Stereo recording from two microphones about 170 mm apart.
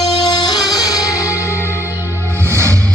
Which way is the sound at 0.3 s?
25° left (ahead or behind).